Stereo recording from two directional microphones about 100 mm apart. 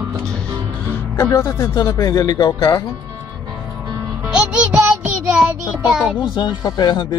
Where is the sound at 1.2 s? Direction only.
30° left (ahead or behind).